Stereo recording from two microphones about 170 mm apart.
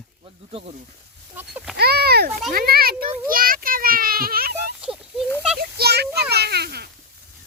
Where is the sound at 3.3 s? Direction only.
55° right (ahead or behind).